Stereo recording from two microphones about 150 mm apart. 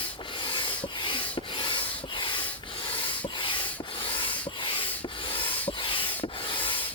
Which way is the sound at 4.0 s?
35° left (ahead or behind).